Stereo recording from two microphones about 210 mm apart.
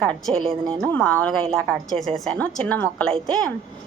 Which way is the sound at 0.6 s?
20° right (ahead or behind).